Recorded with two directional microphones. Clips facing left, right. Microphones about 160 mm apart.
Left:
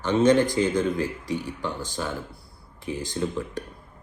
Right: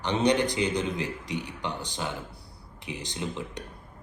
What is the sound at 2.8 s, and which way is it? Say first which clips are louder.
Speech: left 6 dB; 45° left (ahead or behind).